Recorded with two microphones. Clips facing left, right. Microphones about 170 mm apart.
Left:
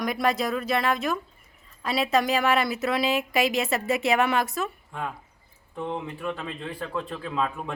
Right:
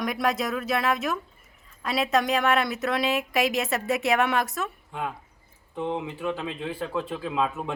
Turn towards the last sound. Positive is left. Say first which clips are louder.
# right 2 dB
turn(degrees=-5)  # may be behind; listen again after turning